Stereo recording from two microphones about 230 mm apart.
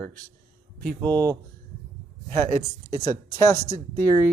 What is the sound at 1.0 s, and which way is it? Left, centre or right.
Speech, centre.